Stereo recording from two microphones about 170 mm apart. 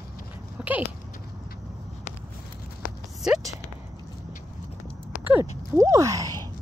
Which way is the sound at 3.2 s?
5° right (ahead or behind).